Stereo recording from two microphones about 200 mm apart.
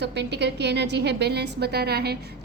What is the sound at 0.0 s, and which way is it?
A woman's voice, 60° right (ahead or behind).